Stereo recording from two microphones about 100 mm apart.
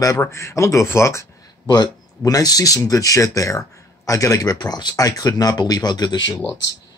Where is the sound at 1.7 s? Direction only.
40° left (ahead or behind).